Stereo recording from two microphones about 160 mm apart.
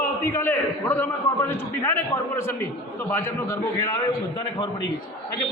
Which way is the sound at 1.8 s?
15° left (ahead or behind).